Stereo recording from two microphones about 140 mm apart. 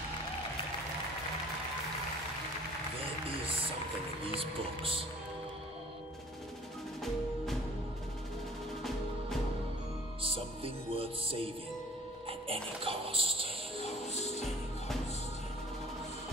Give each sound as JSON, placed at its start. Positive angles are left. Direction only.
{"t": 4.4, "sound": "speech", "side_deg": -40}
{"t": 10.2, "sound": "music", "side_deg": -40}
{"t": 12.8, "sound": "a sound", "side_deg": -40}
{"t": 13.8, "sound": "music", "side_deg": 50}